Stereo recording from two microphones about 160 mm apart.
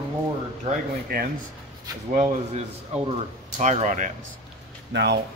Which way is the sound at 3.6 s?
50° right (ahead or behind).